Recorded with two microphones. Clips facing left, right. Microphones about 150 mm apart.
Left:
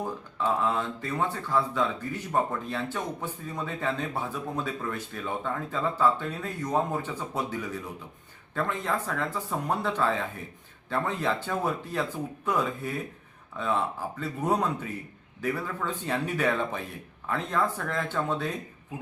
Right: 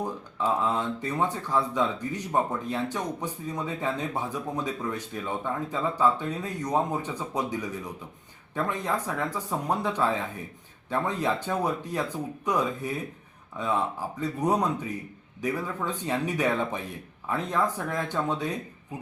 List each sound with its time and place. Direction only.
0.0 s speech: 15° right (ahead or behind)